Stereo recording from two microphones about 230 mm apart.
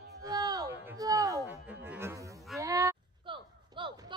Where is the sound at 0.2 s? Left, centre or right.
Centre.